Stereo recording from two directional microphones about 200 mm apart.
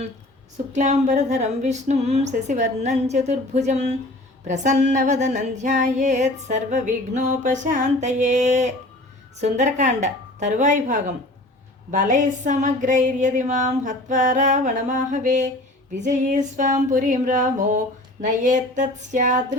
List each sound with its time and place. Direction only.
0.5 s female singing: 35° right (ahead or behind)